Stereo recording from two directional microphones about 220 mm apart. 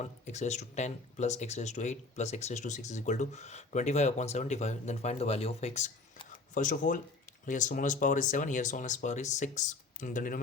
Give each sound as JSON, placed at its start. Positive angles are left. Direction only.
{"t": 0.0, "sound": "speech", "side_deg": 30}